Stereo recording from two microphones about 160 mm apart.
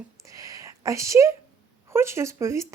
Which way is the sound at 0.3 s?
20° right (ahead or behind).